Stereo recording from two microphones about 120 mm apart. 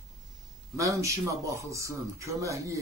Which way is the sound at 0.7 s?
25° right (ahead or behind).